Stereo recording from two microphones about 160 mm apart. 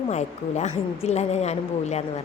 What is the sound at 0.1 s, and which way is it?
A woman's voice, 45° left (ahead or behind).